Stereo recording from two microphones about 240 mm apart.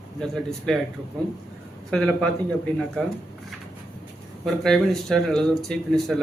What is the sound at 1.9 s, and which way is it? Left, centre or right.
A man's voice, centre.